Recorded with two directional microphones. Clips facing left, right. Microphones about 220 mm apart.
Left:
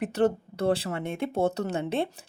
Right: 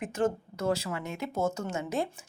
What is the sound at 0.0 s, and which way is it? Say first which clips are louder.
A woman's voice: left 5 dB; 35° left (ahead or behind).